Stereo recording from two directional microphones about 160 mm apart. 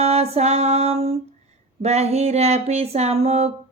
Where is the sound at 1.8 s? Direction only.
40° right (ahead or behind).